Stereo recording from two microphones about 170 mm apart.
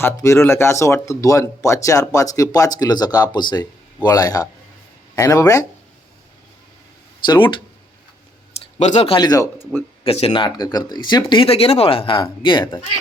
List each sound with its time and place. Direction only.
0.0 s speech: 15° left (ahead or behind)
7.3 s speech: 30° left (ahead or behind)
8.8 s speech: 40° left (ahead or behind)
9.1 s speech: 20° left (ahead or behind)
10.0 s speech: 35° left (ahead or behind)